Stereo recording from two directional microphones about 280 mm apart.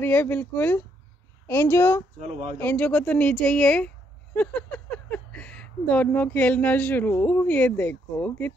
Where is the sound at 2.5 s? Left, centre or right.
Centre.